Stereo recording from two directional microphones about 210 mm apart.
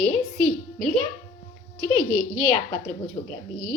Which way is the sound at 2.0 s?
Centre (ahead or behind).